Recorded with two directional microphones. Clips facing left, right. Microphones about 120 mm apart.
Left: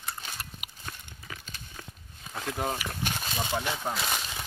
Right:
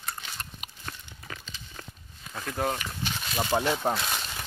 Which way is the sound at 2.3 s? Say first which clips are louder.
Right 2 dB; 15° left (ahead or behind).